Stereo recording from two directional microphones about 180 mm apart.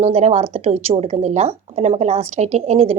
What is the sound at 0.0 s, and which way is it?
A woman's voice, 35° right (ahead or behind).